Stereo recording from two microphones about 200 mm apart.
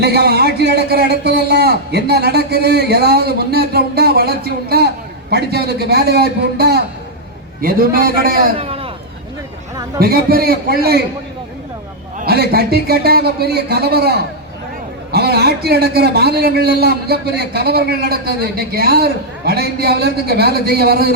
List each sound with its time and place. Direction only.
0.0 s a man's voice: 55° right (ahead or behind)
8.5 s speech: 30° right (ahead or behind)
10.0 s a man's voice: 50° right (ahead or behind)
12.2 s a man's voice: 50° right (ahead or behind)